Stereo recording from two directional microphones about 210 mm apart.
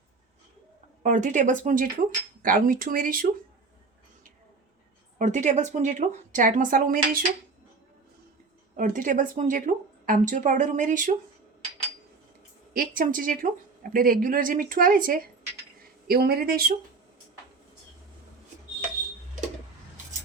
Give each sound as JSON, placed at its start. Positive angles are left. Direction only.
{"t": 1.0, "sound": "a woman's voice", "side_deg": -35}
{"t": 5.1, "sound": "a woman's voice", "side_deg": -35}
{"t": 8.7, "sound": "a woman's voice", "side_deg": -40}
{"t": 12.7, "sound": "a woman's voice", "side_deg": -40}